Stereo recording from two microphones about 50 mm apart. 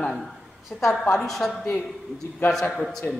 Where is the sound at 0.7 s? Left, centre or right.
Centre.